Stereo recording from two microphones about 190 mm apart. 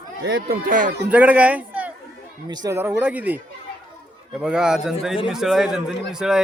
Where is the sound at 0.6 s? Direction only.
45° right (ahead or behind).